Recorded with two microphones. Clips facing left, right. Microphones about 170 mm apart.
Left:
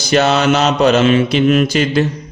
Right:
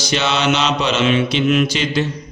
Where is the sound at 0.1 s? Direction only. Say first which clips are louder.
Left 6 dB; 45° left (ahead or behind).